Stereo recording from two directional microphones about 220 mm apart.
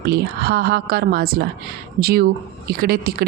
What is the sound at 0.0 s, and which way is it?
Speech, 45° right (ahead or behind).